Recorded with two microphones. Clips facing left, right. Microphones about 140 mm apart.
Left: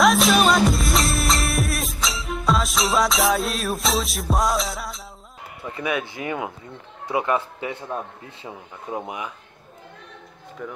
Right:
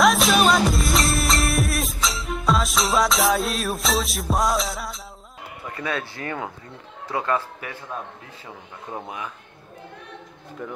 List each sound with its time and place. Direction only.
0.0 s music: centre (ahead or behind)
5.8 s speech: 15° left (ahead or behind)
10.6 s speech: centre (ahead or behind)